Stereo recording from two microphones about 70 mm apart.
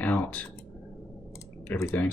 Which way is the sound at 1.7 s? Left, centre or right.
Left.